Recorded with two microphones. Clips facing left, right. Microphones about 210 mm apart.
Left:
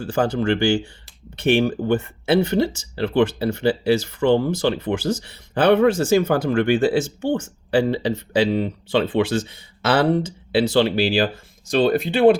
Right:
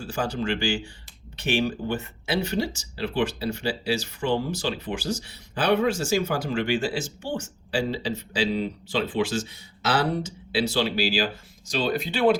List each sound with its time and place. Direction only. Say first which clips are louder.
0.0 s speech: left 7 dB; 60° left (ahead or behind)